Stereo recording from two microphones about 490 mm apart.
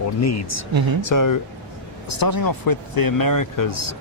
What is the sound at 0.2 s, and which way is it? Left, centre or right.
Speech, left.